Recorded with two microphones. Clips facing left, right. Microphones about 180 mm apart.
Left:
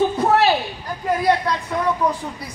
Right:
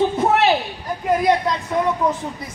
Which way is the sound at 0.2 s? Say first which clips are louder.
Even; 20° right (ahead or behind).